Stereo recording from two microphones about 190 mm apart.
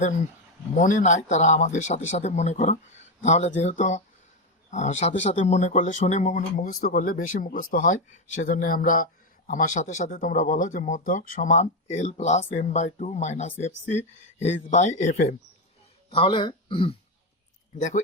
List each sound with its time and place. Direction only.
0.8 s speech: 40° left (ahead or behind)
16.0 s speech: 30° left (ahead or behind)
17.7 s speech: 40° left (ahead or behind)